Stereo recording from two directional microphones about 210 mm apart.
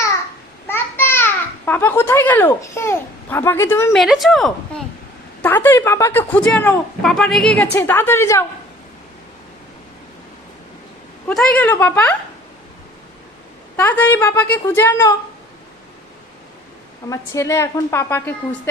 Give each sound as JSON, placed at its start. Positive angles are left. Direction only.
{"t": 0.7, "sound": "babbling", "side_deg": 10}
{"t": 3.9, "sound": "speech", "side_deg": 0}
{"t": 11.3, "sound": "speech", "side_deg": 5}
{"t": 13.7, "sound": "speech", "side_deg": 10}
{"t": 17.1, "sound": "speech", "side_deg": 15}